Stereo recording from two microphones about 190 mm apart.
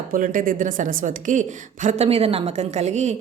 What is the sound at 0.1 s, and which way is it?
A woman's voice, 45° right (ahead or behind).